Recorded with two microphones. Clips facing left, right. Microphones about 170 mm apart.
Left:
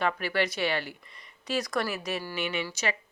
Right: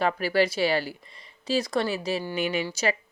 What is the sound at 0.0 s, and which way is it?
Speech, 35° right (ahead or behind).